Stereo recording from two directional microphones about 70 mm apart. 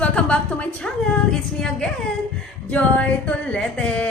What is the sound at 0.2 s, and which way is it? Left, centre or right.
A woman's voice, centre.